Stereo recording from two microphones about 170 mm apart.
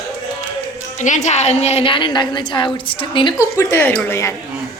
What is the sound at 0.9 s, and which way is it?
A woman's voice, 45° left (ahead or behind).